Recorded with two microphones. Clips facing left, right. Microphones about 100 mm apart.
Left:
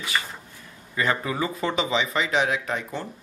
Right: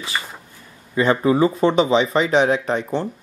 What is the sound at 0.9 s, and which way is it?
Speech, 25° right (ahead or behind).